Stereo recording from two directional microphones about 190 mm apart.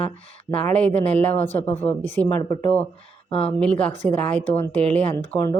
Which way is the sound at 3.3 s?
30° left (ahead or behind).